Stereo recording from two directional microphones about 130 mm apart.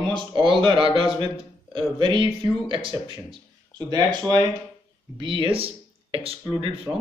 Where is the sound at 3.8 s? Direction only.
30° right (ahead or behind); by 6.7 s 45° right (ahead or behind).